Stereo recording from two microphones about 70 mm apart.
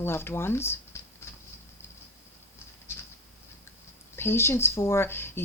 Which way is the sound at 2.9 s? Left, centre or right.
Left.